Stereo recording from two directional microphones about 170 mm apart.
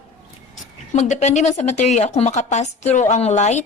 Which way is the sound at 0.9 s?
45° left (ahead or behind).